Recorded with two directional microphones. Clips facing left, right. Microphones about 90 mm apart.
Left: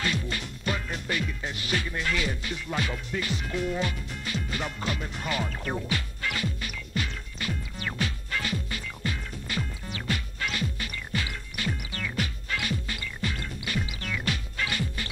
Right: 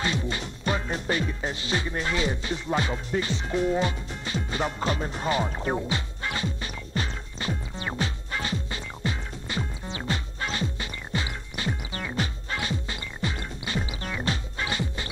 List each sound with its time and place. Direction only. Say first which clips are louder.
0.0 s music: right 2 dB; 25° right (ahead or behind)